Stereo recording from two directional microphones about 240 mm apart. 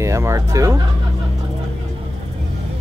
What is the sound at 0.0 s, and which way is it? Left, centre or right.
Speech, centre.